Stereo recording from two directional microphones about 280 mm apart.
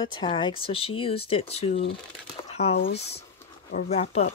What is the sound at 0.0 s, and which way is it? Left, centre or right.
Speech, centre.